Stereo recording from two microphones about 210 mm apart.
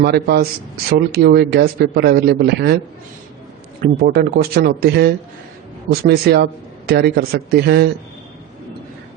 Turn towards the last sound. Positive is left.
turn(degrees=-50)  # may be behind; listen again after turning